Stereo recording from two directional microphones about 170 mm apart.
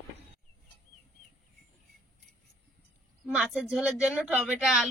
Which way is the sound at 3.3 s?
5° right (ahead or behind).